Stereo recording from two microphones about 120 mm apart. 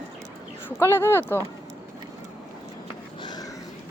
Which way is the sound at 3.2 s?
35° left (ahead or behind).